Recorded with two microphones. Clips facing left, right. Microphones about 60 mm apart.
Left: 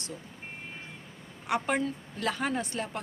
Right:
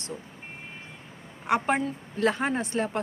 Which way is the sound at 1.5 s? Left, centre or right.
Right.